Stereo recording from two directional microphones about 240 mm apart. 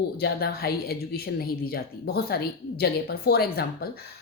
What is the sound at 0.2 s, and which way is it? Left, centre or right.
A woman's voice, left.